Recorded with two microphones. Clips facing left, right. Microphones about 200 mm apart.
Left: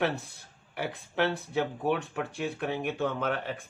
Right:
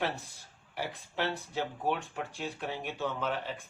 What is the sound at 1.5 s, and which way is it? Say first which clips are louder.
Speech: left 4 dB; 65° left (ahead or behind).